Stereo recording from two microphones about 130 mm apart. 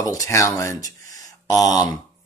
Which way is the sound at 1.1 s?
25° left (ahead or behind).